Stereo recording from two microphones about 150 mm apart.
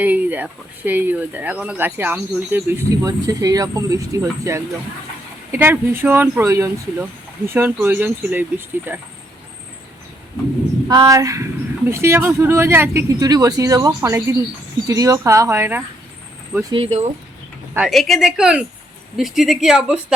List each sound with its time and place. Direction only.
0.0 s speech: 10° right (ahead or behind)
3.0 s speech: 25° right (ahead or behind)
10.8 s speech: 20° right (ahead or behind)
16.7 s speech: 40° right (ahead or behind)
17.7 s speech: centre (ahead or behind)